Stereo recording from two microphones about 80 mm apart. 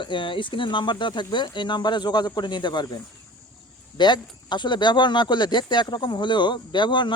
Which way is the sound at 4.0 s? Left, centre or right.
Left.